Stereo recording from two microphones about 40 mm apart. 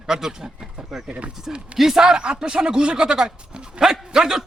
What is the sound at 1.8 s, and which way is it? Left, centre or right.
Speech, centre.